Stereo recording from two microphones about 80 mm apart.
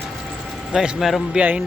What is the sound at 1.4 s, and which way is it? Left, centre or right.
Speech, centre.